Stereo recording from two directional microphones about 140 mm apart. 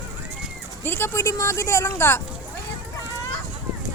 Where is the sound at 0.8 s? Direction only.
15° left (ahead or behind).